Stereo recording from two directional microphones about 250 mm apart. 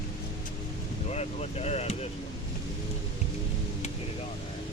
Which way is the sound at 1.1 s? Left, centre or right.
Left.